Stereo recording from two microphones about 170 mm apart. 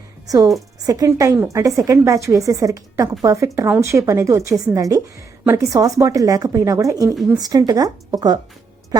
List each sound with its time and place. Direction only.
0.3 s a woman's voice: 20° right (ahead or behind)